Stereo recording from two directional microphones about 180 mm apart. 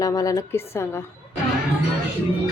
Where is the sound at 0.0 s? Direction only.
20° left (ahead or behind).